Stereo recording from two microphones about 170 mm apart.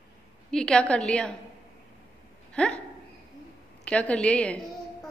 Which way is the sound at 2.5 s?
5° left (ahead or behind).